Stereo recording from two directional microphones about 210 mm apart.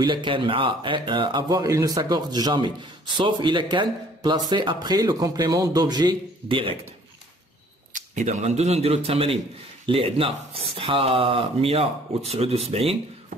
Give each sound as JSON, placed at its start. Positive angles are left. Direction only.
{"t": 0.0, "sound": "speech", "side_deg": -20}
{"t": 7.9, "sound": "speech", "side_deg": -35}